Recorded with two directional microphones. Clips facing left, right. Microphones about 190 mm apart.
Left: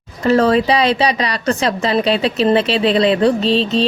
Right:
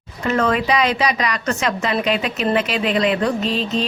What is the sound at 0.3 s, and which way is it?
Speech, 35° left (ahead or behind).